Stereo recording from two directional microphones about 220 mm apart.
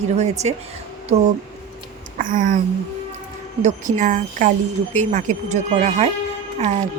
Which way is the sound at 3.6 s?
35° right (ahead or behind).